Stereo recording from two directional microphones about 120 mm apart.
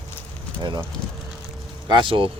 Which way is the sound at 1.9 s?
40° right (ahead or behind).